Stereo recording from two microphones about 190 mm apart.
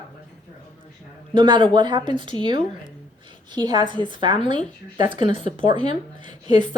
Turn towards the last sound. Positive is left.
turn(degrees=-25)  # may be behind; listen again after turning